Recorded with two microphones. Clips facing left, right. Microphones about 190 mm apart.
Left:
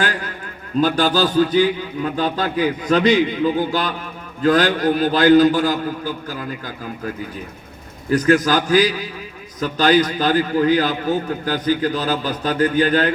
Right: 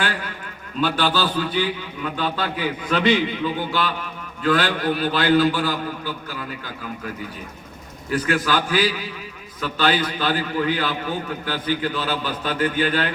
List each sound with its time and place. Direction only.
0.8 s a man's voice: 45° left (ahead or behind)
8.1 s a man's voice: 40° left (ahead or behind)